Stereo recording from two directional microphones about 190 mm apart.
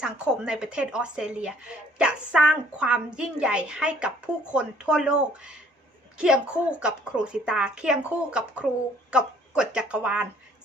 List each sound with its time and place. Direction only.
0.0 s a woman's voice: 5° right (ahead or behind)